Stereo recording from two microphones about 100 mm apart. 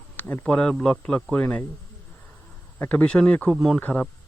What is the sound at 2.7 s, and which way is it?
Speech, 25° left (ahead or behind).